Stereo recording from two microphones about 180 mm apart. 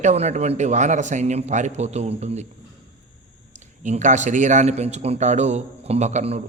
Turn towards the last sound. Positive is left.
turn(degrees=-35)  # may be behind; listen again after turning